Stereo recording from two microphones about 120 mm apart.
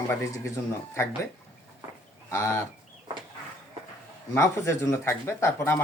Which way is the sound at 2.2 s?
25° left (ahead or behind).